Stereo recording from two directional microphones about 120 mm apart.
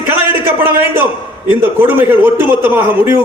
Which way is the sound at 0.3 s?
20° right (ahead or behind).